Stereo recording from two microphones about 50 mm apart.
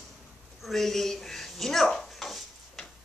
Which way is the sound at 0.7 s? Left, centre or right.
Centre.